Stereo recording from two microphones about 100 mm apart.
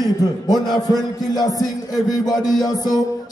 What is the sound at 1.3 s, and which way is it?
Music, 35° left (ahead or behind).